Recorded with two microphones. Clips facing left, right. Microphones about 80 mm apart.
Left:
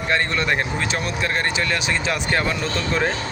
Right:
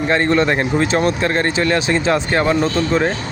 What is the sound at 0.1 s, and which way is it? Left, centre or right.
A man's voice, right.